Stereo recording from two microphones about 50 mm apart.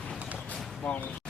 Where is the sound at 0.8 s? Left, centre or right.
Left.